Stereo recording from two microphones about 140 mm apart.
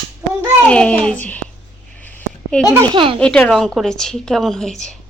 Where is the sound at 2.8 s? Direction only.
35° right (ahead or behind).